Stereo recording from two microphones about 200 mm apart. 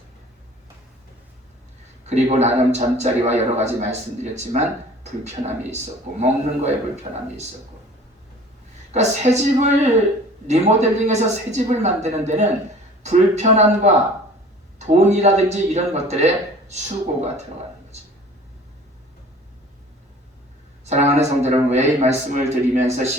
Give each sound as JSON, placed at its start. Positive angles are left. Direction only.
{"t": 2.0, "sound": "a man's voice", "side_deg": -35}
{"t": 5.7, "sound": "a man's voice", "side_deg": -35}
{"t": 8.9, "sound": "a man's voice", "side_deg": -35}
{"t": 20.8, "sound": "a man's voice", "side_deg": -35}